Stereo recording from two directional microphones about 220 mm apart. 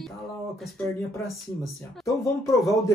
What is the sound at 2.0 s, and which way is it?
Speech, 15° left (ahead or behind).